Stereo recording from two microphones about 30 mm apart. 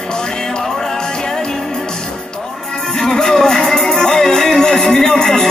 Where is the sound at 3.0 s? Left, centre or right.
Centre.